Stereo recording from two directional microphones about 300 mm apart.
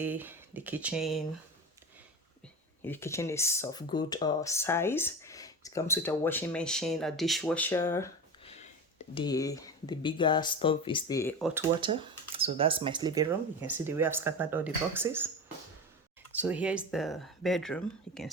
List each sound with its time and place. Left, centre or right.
0.0 s speech: centre
2.8 s speech: centre
9.1 s speech: centre
11.8 s speech: centre
16.3 s speech: centre